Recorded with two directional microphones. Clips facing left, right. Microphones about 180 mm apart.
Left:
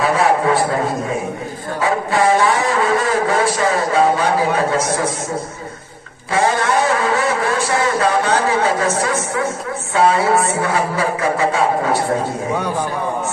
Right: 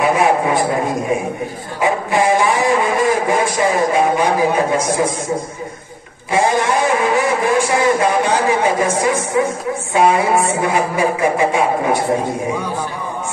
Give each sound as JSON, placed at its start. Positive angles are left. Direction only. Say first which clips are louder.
{"t": 0.0, "sound": "a sound", "louder": "right 1 dB", "side_deg": -15}
{"t": 1.8, "sound": "a man's voice", "louder": "right 1 dB", "side_deg": -15}
{"t": 6.3, "sound": "a man's voice", "louder": "right 1 dB", "side_deg": -15}